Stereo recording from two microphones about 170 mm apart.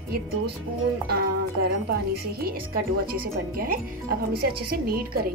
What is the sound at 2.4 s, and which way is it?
Speech, 60° right (ahead or behind).